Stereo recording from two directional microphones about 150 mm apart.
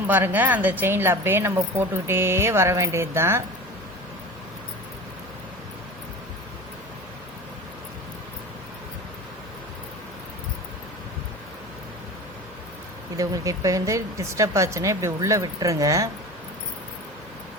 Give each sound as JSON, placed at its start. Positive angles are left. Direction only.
{"t": 0.1, "sound": "a woman's voice", "side_deg": -10}
{"t": 13.1, "sound": "speech", "side_deg": -20}